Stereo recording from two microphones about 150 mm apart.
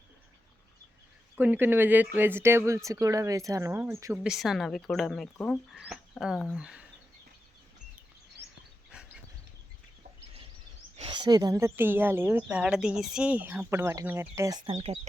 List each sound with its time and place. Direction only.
1.4 s a woman's voice: 10° right (ahead or behind)
4.3 s speech: centre (ahead or behind)
8.9 s dog: 5° right (ahead or behind)
11.1 s a woman's voice: 30° right (ahead or behind)
14.7 s speech: 40° right (ahead or behind)